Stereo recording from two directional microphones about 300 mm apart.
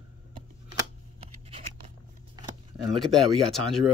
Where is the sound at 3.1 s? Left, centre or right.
Centre.